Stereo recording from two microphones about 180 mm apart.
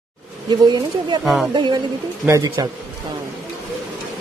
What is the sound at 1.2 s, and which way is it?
Speech, centre (ahead or behind).